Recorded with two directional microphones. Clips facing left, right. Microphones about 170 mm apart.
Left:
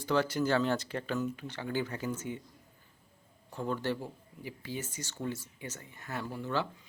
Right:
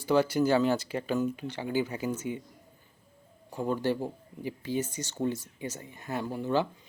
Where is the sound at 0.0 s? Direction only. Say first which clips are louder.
Right 5 dB; 10° right (ahead or behind).